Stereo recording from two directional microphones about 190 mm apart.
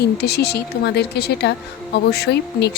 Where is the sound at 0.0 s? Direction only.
60° left (ahead or behind).